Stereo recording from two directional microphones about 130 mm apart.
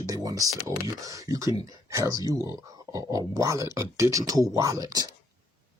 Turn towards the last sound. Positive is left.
turn(degrees=-30)  # may be behind; listen again after turning